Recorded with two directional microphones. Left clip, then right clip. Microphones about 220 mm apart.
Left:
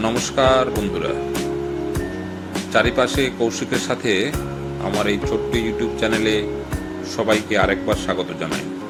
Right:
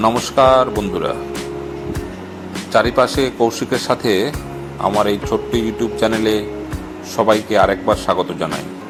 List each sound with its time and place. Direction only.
0.0 s speech: 5° right (ahead or behind)
2.7 s speech: 10° right (ahead or behind)